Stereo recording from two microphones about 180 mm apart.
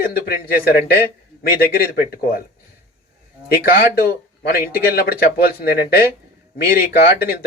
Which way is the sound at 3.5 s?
55° left (ahead or behind).